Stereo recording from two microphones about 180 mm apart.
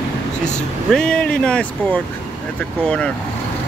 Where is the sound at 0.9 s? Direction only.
5° left (ahead or behind).